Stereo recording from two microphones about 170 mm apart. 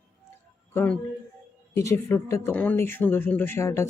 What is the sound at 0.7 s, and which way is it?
A man's voice, 15° left (ahead or behind).